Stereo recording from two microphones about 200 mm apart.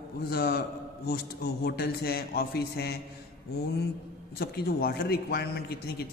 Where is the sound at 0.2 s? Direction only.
50° left (ahead or behind).